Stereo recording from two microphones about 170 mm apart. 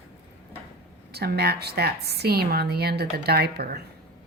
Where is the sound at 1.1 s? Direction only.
70° right (ahead or behind).